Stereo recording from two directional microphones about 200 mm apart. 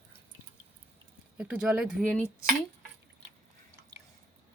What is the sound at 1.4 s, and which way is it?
Speech, 5° right (ahead or behind).